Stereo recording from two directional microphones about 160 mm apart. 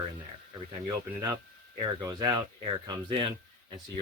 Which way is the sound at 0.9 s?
25° right (ahead or behind).